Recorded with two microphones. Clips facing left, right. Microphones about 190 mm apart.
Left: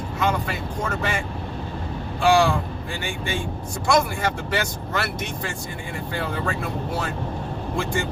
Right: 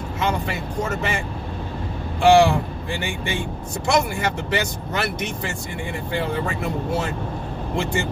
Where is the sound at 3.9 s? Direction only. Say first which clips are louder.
Even; 20° right (ahead or behind).